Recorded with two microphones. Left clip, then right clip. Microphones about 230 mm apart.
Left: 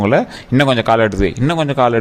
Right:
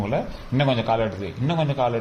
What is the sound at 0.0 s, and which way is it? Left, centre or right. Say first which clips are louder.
A man's voice: left 12 dB; left.